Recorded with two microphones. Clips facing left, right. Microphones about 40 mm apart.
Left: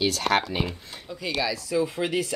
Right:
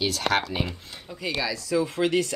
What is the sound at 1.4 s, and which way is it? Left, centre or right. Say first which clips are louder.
Speech: even; centre.